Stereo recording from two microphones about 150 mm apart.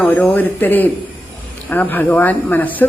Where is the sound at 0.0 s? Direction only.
10° left (ahead or behind).